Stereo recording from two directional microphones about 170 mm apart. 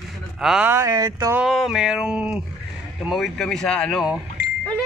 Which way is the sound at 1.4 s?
Centre (ahead or behind).